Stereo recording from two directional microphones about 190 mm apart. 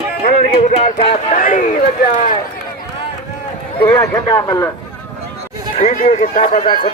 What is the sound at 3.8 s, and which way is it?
Speech, 15° left (ahead or behind).